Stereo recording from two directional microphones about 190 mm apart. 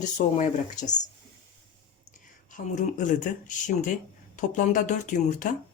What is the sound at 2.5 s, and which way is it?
Speech, 40° left (ahead or behind).